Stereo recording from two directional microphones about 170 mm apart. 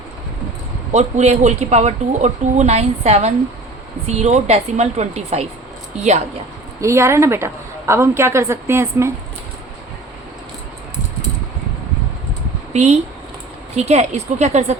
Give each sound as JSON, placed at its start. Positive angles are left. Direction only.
{"t": 0.9, "sound": "speech", "side_deg": -40}
{"t": 6.8, "sound": "a woman's voice", "side_deg": -15}
{"t": 12.7, "sound": "speech", "side_deg": -40}